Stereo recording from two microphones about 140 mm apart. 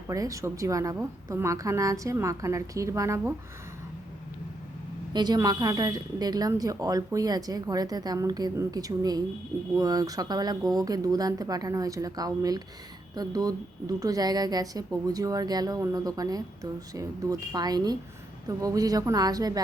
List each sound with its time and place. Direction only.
0.1 s a woman's voice: 25° right (ahead or behind)
5.1 s a woman's voice: 30° right (ahead or behind)